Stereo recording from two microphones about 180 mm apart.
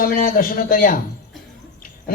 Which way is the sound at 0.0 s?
50° left (ahead or behind).